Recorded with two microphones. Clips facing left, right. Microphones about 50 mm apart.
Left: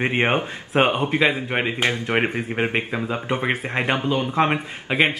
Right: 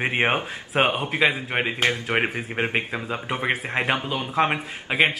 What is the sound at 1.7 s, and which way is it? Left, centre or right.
Speech, left.